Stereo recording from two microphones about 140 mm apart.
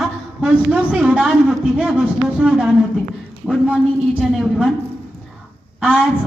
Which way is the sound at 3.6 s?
5° right (ahead or behind).